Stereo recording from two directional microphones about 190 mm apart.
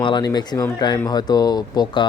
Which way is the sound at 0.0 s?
20° left (ahead or behind).